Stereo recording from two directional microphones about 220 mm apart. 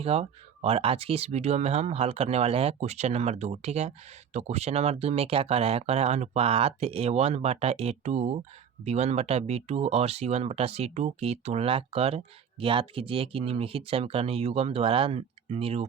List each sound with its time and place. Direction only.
0.0 s speech: 25° right (ahead or behind)